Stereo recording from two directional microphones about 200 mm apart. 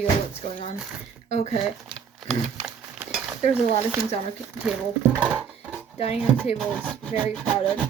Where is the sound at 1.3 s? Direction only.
35° left (ahead or behind).